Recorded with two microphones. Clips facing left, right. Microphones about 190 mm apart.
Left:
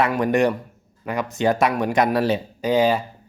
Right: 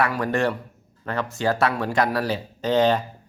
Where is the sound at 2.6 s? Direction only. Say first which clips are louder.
Even; 10° left (ahead or behind).